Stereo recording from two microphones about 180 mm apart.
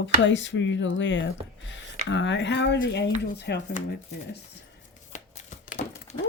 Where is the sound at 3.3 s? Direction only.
70° left (ahead or behind).